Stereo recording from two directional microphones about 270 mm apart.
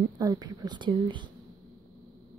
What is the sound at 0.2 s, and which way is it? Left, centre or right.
Speech, centre.